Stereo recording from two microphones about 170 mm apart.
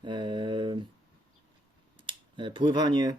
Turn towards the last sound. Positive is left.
turn(degrees=-25)  # may be behind; listen again after turning